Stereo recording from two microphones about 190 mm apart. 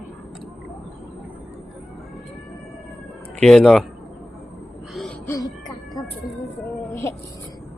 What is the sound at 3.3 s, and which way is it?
Speech, centre (ahead or behind).